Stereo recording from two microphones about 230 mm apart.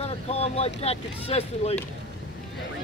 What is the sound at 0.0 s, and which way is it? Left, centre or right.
Speech, left.